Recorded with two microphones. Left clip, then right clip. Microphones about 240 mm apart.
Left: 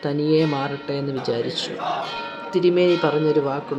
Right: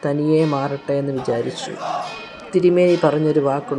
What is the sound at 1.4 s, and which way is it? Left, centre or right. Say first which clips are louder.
Speech: right 1 dB; right.